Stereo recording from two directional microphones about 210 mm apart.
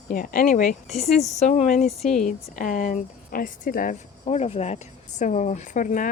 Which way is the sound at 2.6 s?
40° left (ahead or behind).